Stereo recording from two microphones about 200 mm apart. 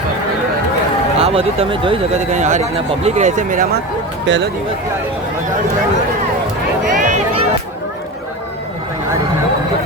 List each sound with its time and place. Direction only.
1.2 s speech: 30° right (ahead or behind)
4.3 s speech: 65° right (ahead or behind)
6.8 s a sound: 40° right (ahead or behind)